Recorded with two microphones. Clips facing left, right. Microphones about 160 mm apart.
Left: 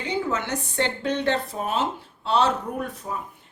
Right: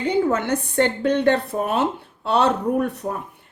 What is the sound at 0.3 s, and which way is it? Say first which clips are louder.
Speech: right 6 dB; 55° right (ahead or behind).